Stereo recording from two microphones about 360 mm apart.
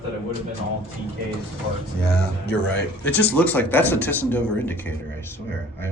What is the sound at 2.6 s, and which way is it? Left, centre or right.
Speech, centre.